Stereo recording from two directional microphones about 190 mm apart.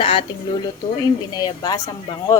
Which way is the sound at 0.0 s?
30° left (ahead or behind).